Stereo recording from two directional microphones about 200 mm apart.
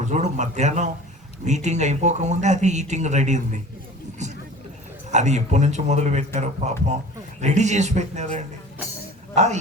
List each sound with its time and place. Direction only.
0.0 s a woman's voice: 35° right (ahead or behind)